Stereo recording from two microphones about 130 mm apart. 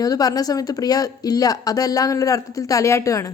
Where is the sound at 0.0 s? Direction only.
30° left (ahead or behind).